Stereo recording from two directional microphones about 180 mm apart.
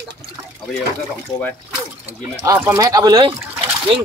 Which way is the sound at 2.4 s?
15° right (ahead or behind).